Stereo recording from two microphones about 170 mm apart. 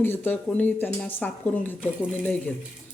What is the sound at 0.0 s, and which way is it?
Speech, 10° left (ahead or behind).